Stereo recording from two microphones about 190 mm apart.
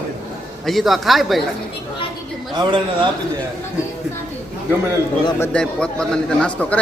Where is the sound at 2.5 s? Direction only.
25° right (ahead or behind).